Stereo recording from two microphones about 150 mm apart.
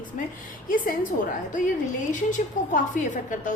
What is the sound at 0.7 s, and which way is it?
Speech, 65° left (ahead or behind).